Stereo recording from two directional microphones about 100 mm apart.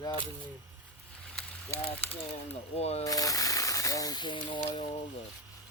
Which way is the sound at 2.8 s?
90° left.